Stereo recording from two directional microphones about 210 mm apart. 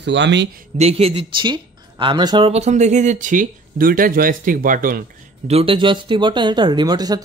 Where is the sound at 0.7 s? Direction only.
30° right (ahead or behind).